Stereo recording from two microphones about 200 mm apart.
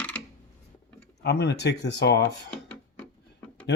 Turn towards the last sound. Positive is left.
turn(degrees=5)  # may be behind; listen again after turning